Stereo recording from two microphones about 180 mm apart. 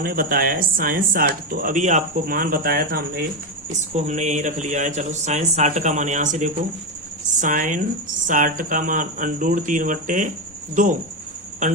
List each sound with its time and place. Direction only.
0.0 s speech: 55° right (ahead or behind)
3.7 s speech: 40° right (ahead or behind)